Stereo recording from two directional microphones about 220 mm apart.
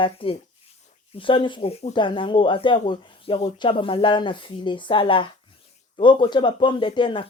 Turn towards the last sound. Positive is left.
turn(degrees=20)  # may be behind; listen again after turning